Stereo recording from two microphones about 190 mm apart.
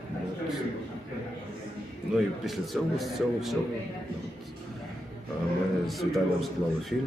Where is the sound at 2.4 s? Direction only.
Centre (ahead or behind).